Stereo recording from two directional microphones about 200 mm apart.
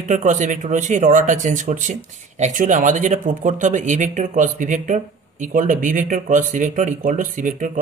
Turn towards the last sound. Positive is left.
turn(degrees=-40)  # may be behind; listen again after turning